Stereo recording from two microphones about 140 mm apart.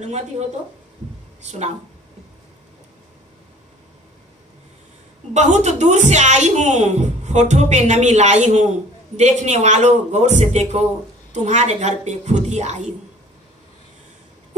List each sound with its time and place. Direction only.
1.4 s a woman's voice: 55° right (ahead or behind)
5.3 s a woman's voice: 55° right (ahead or behind)